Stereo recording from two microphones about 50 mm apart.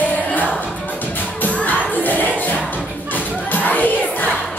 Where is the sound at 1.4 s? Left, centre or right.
Left.